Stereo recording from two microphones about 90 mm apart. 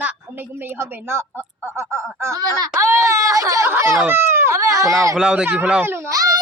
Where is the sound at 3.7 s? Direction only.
30° right (ahead or behind).